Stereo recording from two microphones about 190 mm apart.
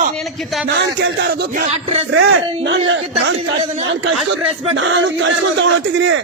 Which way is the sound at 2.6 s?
75° right (ahead or behind).